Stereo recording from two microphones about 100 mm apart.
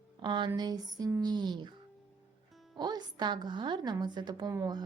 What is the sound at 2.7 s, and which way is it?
Speech, 45° right (ahead or behind).